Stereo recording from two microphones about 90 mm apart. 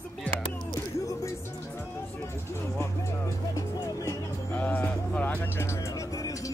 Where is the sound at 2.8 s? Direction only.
30° left (ahead or behind).